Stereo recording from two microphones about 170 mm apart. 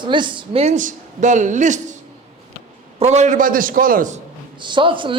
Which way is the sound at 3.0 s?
40° right (ahead or behind).